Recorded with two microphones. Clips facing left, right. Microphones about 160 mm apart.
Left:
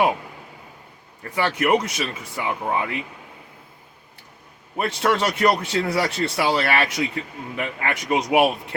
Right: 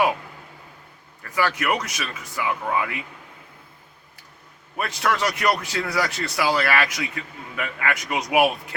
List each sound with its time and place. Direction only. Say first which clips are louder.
1.2 s a man's voice: left 2 dB; 25° left (ahead or behind)
4.8 s a man's voice: left 3 dB; 30° left (ahead or behind)